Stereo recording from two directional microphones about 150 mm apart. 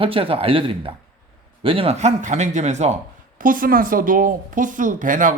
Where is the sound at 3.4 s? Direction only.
65° right (ahead or behind).